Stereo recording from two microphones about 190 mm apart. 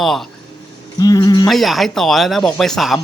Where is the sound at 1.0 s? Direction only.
20° left (ahead or behind).